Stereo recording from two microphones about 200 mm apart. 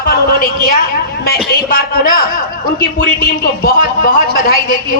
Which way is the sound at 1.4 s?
50° left (ahead or behind).